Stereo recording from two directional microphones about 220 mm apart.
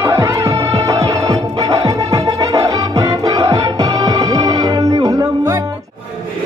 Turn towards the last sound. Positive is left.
turn(degrees=-15)  # may be behind; listen again after turning